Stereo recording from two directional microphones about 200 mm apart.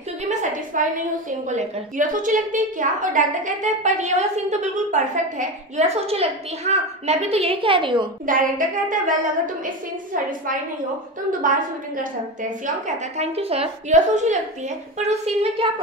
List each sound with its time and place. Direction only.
0.3 s a sound: 40° right (ahead or behind)
1.5 s a woman's voice: 40° right (ahead or behind)
8.3 s a woman's voice: 45° right (ahead or behind)
11.4 s a woman's voice: 40° right (ahead or behind)